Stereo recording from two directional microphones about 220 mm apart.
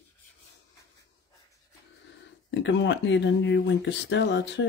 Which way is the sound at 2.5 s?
55° left (ahead or behind).